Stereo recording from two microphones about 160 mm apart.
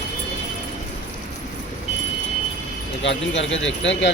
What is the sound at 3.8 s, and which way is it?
Speech, 90° left.